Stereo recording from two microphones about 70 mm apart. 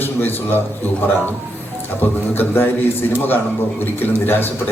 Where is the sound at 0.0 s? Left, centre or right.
Left.